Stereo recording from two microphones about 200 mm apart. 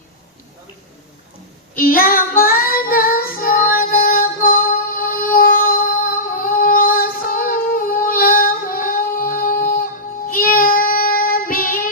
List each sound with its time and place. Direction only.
1.7 s child singing: 45° left (ahead or behind)